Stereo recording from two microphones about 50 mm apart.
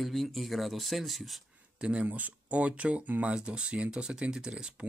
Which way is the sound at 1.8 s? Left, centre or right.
Right.